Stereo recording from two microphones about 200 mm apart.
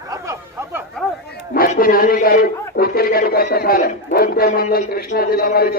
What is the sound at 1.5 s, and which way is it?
A man's voice, 45° left (ahead or behind).